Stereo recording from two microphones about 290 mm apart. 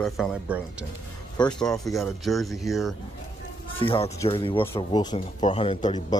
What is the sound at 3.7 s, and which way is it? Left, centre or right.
A man's voice, centre.